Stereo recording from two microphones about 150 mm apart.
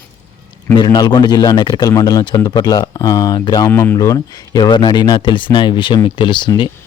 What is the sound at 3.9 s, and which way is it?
Speech, 25° left (ahead or behind).